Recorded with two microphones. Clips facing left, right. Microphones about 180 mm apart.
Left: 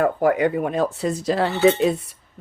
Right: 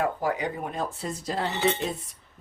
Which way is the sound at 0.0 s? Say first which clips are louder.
Left 9 dB; 55° left (ahead or behind).